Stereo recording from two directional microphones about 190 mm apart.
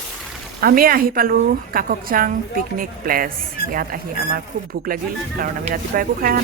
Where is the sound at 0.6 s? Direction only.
50° right (ahead or behind).